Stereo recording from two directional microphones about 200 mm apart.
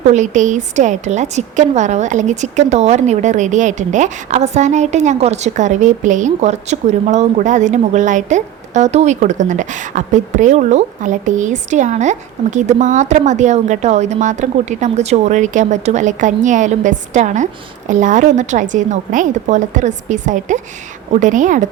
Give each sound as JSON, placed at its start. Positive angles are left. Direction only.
{"t": 0.1, "sound": "a woman's voice", "side_deg": -35}